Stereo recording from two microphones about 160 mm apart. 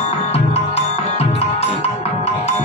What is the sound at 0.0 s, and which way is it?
Music, 40° left (ahead or behind).